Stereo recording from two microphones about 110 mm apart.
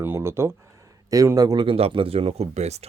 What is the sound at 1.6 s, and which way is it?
Speech, 60° right (ahead or behind).